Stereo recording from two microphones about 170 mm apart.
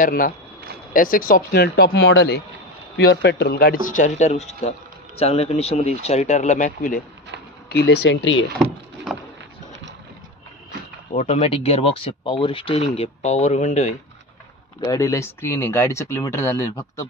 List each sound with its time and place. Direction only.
0.0 s speech: 55° left (ahead or behind)
7.7 s speech: 75° left (ahead or behind)
9.1 s vehicle: centre (ahead or behind)
11.1 s speech: 45° left (ahead or behind)
14.8 s speech: 20° left (ahead or behind)